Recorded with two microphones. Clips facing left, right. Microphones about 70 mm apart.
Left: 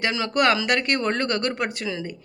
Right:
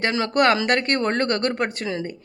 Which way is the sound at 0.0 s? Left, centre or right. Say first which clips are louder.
Right 2 dB; right.